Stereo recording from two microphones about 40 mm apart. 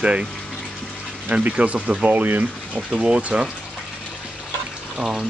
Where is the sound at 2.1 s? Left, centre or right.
Right.